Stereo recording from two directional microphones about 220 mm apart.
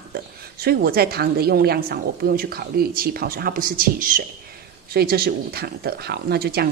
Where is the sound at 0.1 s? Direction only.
45° right (ahead or behind).